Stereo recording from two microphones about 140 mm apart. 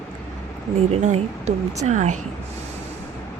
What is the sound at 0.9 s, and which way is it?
Speech, 55° right (ahead or behind).